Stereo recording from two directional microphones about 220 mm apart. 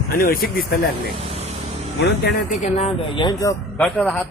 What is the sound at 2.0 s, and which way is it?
Speech, 50° left (ahead or behind).